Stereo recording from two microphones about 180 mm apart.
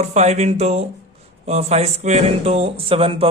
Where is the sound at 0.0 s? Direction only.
40° right (ahead or behind).